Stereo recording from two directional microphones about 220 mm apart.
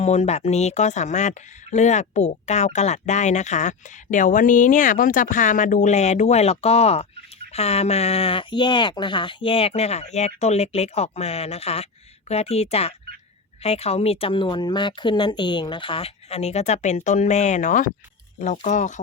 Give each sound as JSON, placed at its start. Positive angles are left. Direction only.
{"t": 0.0, "sound": "speech", "side_deg": 30}